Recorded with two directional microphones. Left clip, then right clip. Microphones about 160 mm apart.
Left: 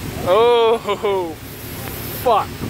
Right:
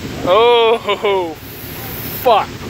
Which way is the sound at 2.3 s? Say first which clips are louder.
Right 4 dB; 10° left (ahead or behind).